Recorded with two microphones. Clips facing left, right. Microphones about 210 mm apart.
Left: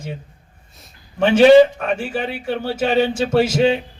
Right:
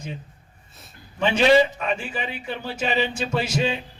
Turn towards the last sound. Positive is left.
turn(degrees=55)  # may be behind; listen again after turning